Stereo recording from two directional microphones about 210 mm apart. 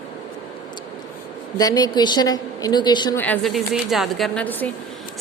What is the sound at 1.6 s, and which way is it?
A woman's voice, 15° left (ahead or behind).